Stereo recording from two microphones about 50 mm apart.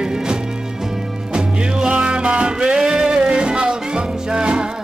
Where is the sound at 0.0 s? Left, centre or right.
Centre.